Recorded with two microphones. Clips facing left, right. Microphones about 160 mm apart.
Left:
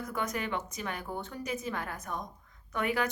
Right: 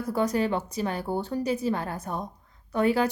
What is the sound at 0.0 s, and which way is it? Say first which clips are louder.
A woman's voice: right 9 dB; 35° right (ahead or behind).